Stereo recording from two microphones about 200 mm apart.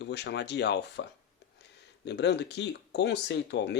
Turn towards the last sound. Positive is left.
turn(degrees=60)  # may be behind; listen again after turning